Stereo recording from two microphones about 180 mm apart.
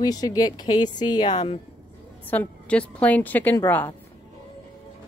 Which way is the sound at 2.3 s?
10° left (ahead or behind).